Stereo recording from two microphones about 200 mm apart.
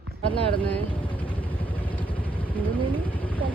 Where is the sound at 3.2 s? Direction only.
10° left (ahead or behind).